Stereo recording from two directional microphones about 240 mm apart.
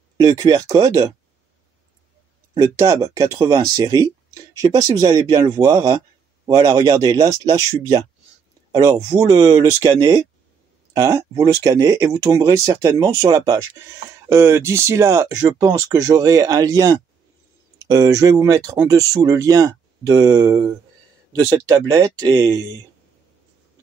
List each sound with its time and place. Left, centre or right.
0.2 s speech: centre
2.5 s speech: centre